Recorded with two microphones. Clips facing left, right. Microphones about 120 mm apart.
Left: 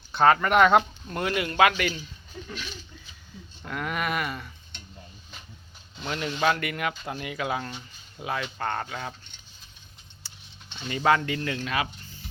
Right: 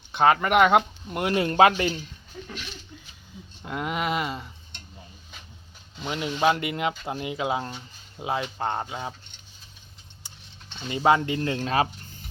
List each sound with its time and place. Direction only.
0.1 s speech: 20° right (ahead or behind)
1.2 s speech: 30° right (ahead or behind)
3.6 s speech: 20° right (ahead or behind)
6.0 s speech: 15° right (ahead or behind)
10.8 s speech: 20° right (ahead or behind)